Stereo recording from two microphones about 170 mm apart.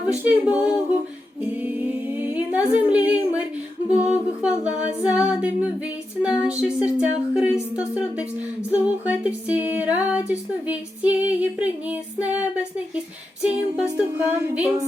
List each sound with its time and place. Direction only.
0.3 s music: 10° right (ahead or behind)
1.6 s humming: 10° right (ahead or behind)
3.8 s music: 5° right (ahead or behind)
8.7 s music: 10° right (ahead or behind)